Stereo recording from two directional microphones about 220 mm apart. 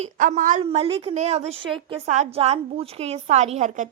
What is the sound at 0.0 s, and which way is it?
A woman's voice, 35° right (ahead or behind).